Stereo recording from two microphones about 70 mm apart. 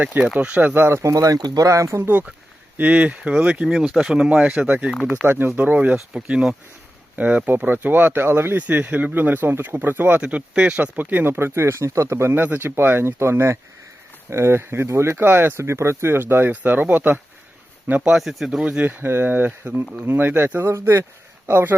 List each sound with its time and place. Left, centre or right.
0.0 s speech: right
1.1 s speech: right
2.7 s speech: right
4.9 s speech: centre
5.2 s speech: right; by 6.6 s centre
7.2 s speech: right
8.6 s speech: right
12.4 s speech: right
18.1 s speech: centre
18.6 s speech: right
20.7 s speech: right